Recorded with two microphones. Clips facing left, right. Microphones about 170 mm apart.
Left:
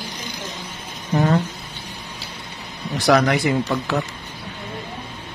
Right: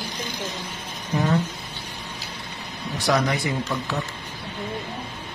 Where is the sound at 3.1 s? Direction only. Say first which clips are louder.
Left 6 dB; 80° left.